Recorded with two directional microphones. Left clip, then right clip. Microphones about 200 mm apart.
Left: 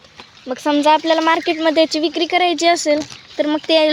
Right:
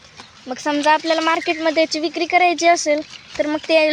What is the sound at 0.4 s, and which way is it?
Speech, 50° left (ahead or behind).